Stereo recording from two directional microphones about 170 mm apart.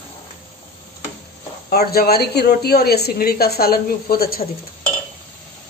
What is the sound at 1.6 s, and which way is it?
Speech, 65° left (ahead or behind).